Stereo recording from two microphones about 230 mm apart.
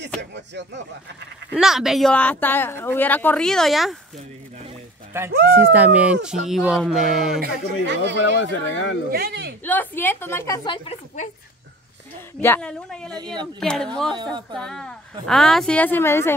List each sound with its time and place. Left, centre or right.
0.2 s speech: right
1.5 s a woman's voice: centre
5.1 s a woman's voice: centre
7.3 s speech: right
8.4 s speech: left
9.1 s speech: right
9.6 s a woman's voice: centre
12.4 s a woman's voice: centre
13.1 s speech: centre
13.6 s a woman's voice: centre